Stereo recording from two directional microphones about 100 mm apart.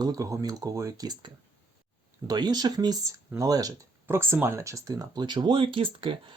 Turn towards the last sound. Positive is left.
turn(degrees=-60)  # may be behind; listen again after turning